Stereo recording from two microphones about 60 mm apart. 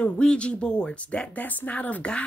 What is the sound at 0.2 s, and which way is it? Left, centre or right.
Speech, centre.